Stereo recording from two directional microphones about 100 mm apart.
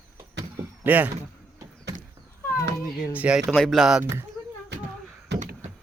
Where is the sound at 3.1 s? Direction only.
10° right (ahead or behind).